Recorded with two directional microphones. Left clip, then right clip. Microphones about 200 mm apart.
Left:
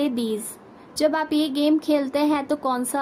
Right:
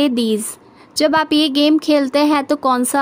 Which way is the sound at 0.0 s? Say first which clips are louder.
Right 8 dB; 50° right (ahead or behind).